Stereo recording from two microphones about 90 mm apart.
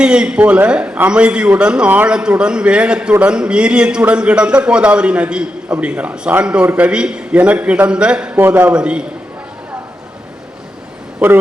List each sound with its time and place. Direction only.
0.0 s a man's voice: 10° right (ahead or behind)
8.4 s a man's voice: 25° right (ahead or behind)
8.7 s a man's voice: 10° right (ahead or behind)